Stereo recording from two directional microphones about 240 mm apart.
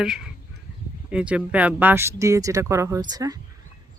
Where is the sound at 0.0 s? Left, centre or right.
Centre.